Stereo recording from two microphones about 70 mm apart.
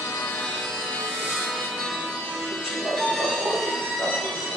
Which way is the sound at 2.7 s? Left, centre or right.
Centre.